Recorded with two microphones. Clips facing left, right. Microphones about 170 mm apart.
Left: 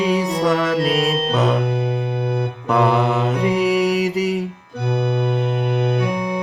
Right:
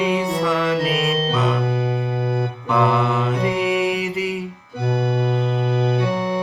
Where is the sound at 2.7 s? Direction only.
40° left (ahead or behind).